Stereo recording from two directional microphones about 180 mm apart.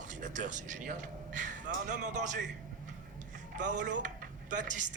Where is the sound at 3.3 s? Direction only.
45° right (ahead or behind).